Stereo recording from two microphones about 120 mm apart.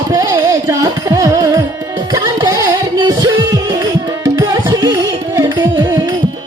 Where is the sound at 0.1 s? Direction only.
30° right (ahead or behind).